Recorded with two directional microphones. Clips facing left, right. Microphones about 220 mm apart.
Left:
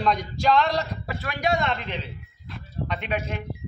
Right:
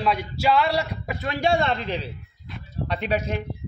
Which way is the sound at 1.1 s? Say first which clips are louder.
Right 3 dB; 25° right (ahead or behind).